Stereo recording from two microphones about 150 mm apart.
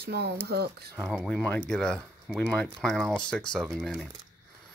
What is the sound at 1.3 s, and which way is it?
Speech, 10° left (ahead or behind).